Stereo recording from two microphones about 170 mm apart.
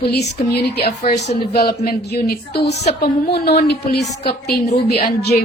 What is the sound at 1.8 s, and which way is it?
A woman's voice, 70° left (ahead or behind).